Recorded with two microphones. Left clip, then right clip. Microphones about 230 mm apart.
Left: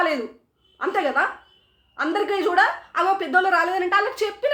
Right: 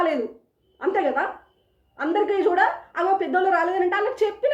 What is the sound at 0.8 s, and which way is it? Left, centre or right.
A woman's voice, centre.